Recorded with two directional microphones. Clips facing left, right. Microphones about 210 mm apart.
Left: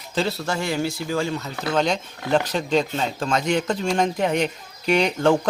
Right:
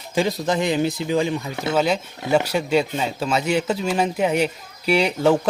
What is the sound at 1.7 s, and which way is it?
Speech, 5° right (ahead or behind).